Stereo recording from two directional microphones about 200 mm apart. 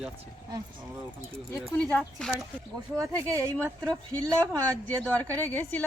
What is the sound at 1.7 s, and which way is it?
Speech, 10° left (ahead or behind).